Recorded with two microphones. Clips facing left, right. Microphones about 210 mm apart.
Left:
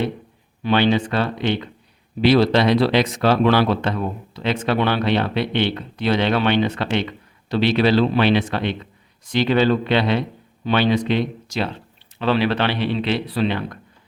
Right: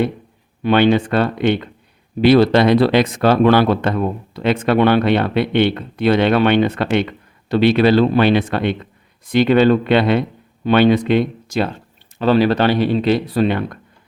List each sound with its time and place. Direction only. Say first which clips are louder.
0.6 s speech: right 4 dB; 55° right (ahead or behind)